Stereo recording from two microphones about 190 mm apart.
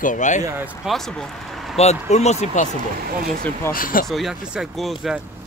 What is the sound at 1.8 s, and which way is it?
Speech, 35° left (ahead or behind).